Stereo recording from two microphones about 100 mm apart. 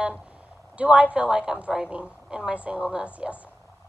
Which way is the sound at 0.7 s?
10° right (ahead or behind).